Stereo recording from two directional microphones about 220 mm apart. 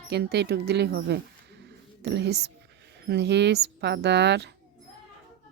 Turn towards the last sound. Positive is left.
turn(degrees=-50)  # may be behind; listen again after turning